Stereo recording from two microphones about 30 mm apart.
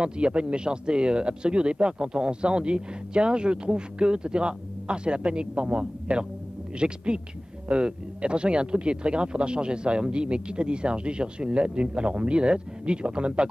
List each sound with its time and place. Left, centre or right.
0.0 s speech: right